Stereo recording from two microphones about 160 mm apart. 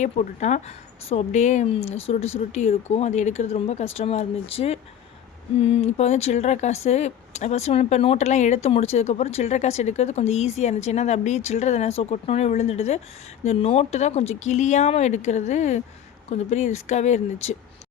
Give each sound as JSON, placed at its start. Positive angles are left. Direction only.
{"t": 0.0, "sound": "speech", "side_deg": 50}